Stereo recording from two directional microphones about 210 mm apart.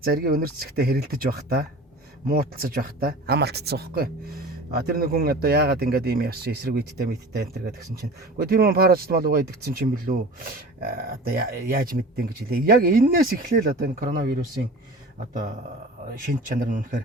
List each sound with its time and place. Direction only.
0.0 s speech: 45° right (ahead or behind)
16.0 s speech: 40° right (ahead or behind)